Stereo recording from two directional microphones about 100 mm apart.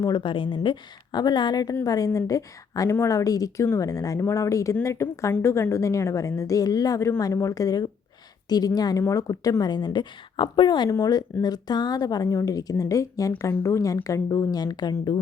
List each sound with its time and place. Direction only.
0.0 s a woman's voice: 40° left (ahead or behind)
0.3 s a woman's voice: 55° left (ahead or behind)
10.8 s a woman's voice: 35° left (ahead or behind)